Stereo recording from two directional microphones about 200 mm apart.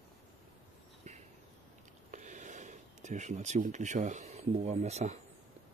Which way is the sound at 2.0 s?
40° right (ahead or behind).